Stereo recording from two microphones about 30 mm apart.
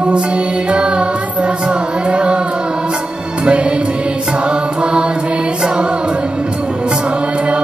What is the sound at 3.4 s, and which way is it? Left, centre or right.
Music, right.